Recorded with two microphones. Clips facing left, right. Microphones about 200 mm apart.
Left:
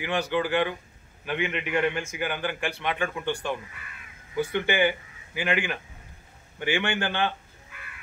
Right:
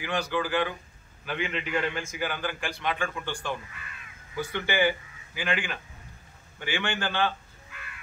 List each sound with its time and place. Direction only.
0.0 s a man's voice: 20° left (ahead or behind)